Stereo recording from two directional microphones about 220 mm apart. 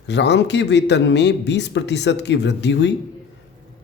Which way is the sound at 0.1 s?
50° left (ahead or behind).